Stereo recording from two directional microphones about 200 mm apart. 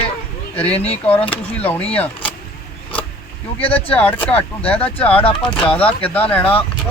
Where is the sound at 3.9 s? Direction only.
10° left (ahead or behind).